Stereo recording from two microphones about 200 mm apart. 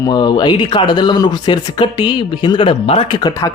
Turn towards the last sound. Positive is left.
turn(degrees=20)  # may be behind; listen again after turning